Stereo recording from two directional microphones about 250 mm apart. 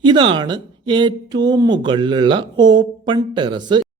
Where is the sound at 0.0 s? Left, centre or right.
Centre.